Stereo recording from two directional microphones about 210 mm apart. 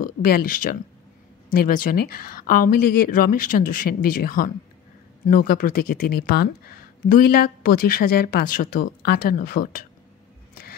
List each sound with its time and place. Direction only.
0.0 s speech: 40° left (ahead or behind)